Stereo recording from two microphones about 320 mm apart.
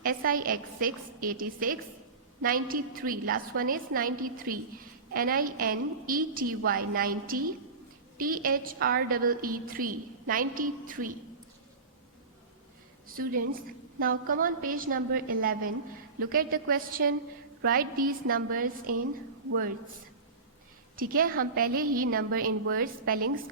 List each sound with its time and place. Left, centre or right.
0.0 s a woman's voice: right
14.0 s a woman's voice: right
20.9 s a woman's voice: right